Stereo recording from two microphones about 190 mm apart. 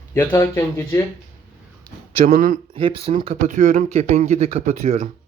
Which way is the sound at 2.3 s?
45° right (ahead or behind).